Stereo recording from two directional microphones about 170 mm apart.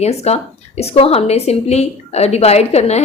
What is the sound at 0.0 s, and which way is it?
A woman's voice, 40° left (ahead or behind).